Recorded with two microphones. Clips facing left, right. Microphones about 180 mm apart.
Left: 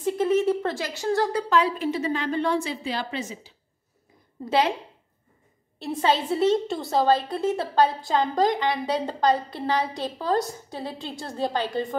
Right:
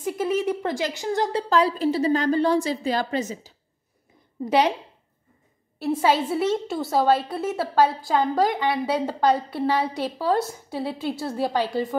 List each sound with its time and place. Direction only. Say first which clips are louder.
0.0 s a sound: left 2 dB; 10° right (ahead or behind)
0.5 s a woman's voice: even; 15° right (ahead or behind)
1.5 s a woman's voice: right 2 dB; 35° right (ahead or behind)
4.5 s a woman's voice: right 2 dB; 20° right (ahead or behind)
5.8 s a woman's voice: right 3 dB; 5° right (ahead or behind)